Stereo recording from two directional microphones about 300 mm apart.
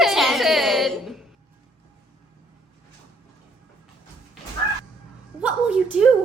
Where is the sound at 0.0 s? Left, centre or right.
Centre.